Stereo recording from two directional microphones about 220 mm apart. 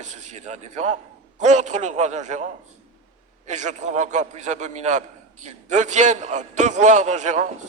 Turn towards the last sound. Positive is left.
turn(degrees=-35)  # may be behind; listen again after turning